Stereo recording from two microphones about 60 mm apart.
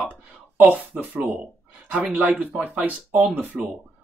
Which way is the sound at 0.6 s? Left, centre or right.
Right.